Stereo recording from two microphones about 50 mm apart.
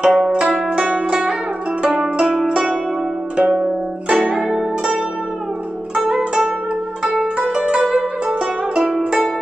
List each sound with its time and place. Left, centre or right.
0.0 s zither: centre
0.7 s music: centre
1.8 s zither: right
5.9 s zither: centre
7.5 s music: centre